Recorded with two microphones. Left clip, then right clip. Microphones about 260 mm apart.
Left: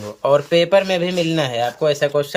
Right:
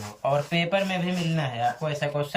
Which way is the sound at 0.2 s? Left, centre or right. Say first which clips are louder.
Left 10 dB; centre.